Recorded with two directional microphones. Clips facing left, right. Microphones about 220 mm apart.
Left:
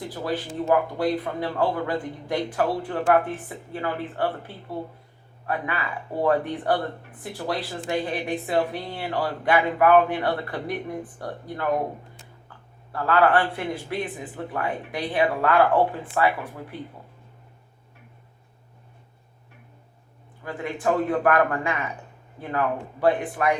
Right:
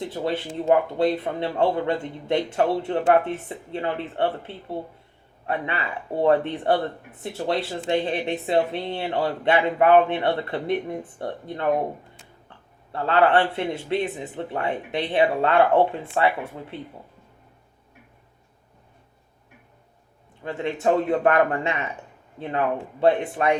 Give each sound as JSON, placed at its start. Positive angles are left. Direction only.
{"t": 0.1, "sound": "speech", "side_deg": -25}
{"t": 12.9, "sound": "speech", "side_deg": -25}
{"t": 20.4, "sound": "speech", "side_deg": -25}